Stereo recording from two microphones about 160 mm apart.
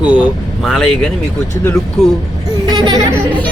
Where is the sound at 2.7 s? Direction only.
30° right (ahead or behind).